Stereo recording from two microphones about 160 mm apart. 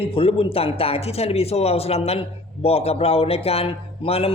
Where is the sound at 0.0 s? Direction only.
35° left (ahead or behind).